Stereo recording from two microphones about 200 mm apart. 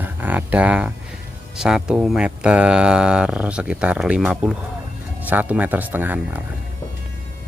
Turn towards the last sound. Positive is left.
turn(degrees=-10)  # may be behind; listen again after turning